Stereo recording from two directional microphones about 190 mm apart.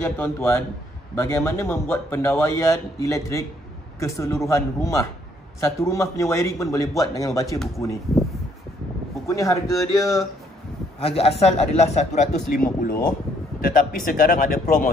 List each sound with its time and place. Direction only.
0.0 s a man's voice: 10° left (ahead or behind)
9.3 s a man's voice: 15° left (ahead or behind)
9.7 s speech: centre (ahead or behind)
11.1 s a man's voice: 30° left (ahead or behind); by 14.9 s 50° left (ahead or behind)